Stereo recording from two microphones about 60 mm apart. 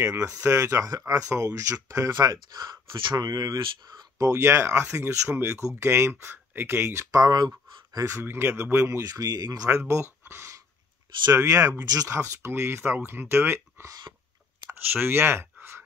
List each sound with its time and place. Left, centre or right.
0.0 s speech: right
1.3 s speech: right
3.3 s speech: right
4.3 s speech: right
7.1 s speech: right
8.2 s speech: right
8.8 s speech: right
9.7 s speech: right
10.2 s a sound: right
11.3 s speech: right
11.8 s speech: right
12.2 s speech: right
14.9 s speech: right